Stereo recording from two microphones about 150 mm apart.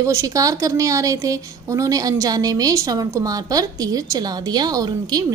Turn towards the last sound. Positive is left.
turn(degrees=-25)  # may be behind; listen again after turning